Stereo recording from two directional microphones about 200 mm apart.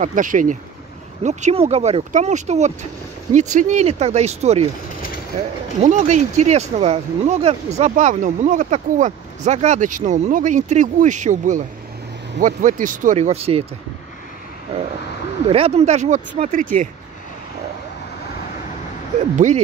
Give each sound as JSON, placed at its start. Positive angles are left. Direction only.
{"t": 0.0, "sound": "speech", "side_deg": -40}
{"t": 5.8, "sound": "speech", "side_deg": -35}
{"t": 15.5, "sound": "speech", "side_deg": -30}
{"t": 19.3, "sound": "speech", "side_deg": -35}